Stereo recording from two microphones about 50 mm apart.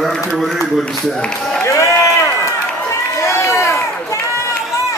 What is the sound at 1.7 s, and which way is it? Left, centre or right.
Run, left.